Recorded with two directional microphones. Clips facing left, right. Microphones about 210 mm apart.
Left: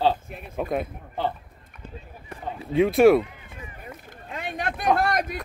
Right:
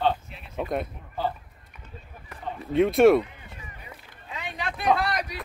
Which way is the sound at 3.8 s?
50° left (ahead or behind).